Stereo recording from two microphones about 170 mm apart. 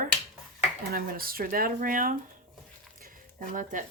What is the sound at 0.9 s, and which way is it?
Speech, 60° right (ahead or behind).